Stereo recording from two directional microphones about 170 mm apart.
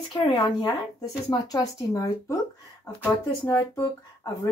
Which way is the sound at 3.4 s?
20° left (ahead or behind).